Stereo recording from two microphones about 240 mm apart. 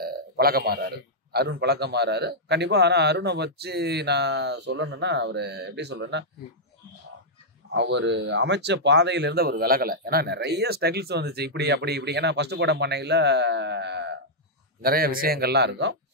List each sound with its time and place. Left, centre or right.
0.0 s speech: right
7.7 s a man's voice: right